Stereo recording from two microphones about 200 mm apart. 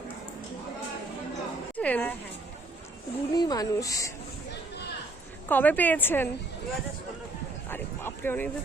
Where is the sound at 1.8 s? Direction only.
5° left (ahead or behind).